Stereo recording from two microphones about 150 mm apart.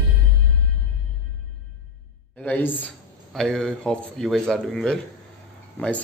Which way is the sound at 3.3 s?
Centre (ahead or behind).